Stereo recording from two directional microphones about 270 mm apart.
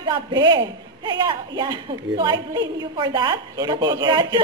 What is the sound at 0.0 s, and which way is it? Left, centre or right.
Speech, centre.